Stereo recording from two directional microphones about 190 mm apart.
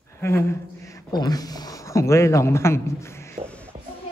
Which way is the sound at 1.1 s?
20° left (ahead or behind).